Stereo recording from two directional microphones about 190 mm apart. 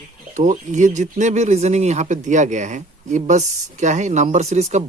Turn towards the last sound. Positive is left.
turn(degrees=-35)  # may be behind; listen again after turning